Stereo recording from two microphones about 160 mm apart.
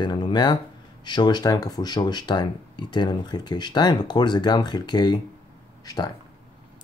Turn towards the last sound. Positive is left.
turn(degrees=25)  # may be behind; listen again after turning